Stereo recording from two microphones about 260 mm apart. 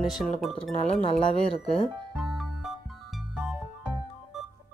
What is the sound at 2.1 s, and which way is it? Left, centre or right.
Music, centre.